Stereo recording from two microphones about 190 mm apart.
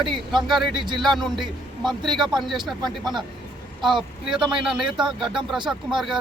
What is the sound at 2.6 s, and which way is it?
Speech, 25° right (ahead or behind).